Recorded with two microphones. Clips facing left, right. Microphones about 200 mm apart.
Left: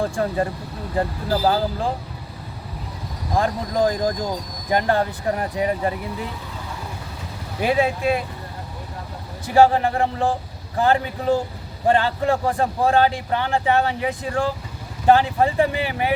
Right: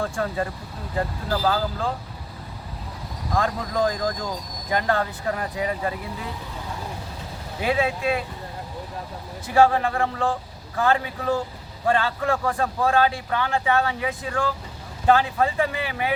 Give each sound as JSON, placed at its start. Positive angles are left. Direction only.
{"t": 0.0, "sound": "a man's voice", "side_deg": 30}
{"t": 3.3, "sound": "speech", "side_deg": 30}
{"t": 9.6, "sound": "a man's voice", "side_deg": 30}